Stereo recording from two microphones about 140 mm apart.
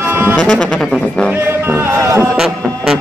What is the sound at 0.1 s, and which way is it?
Music, 15° right (ahead or behind).